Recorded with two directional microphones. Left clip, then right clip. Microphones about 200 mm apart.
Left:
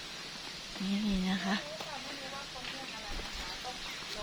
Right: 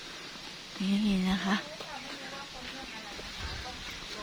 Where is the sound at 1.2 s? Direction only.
25° right (ahead or behind).